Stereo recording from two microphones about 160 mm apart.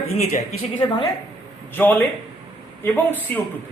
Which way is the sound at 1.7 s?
15° left (ahead or behind).